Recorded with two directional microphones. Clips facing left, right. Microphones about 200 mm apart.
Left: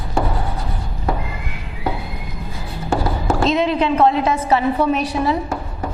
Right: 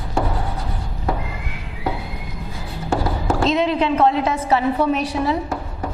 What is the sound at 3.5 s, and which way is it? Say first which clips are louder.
A woman's voice: left 1 dB; 15° left (ahead or behind).